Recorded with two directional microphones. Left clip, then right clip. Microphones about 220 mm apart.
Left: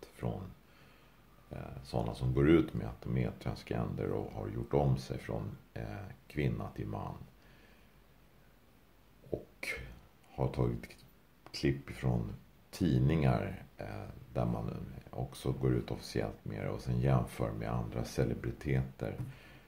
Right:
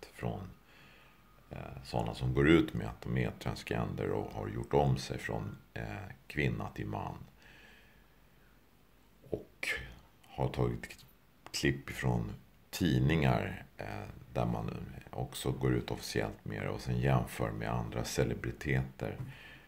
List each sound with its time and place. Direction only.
0.0 s a sound: centre (ahead or behind)
1.5 s speech: centre (ahead or behind)
9.3 s whispering: centre (ahead or behind)
11.4 s speech: 5° right (ahead or behind)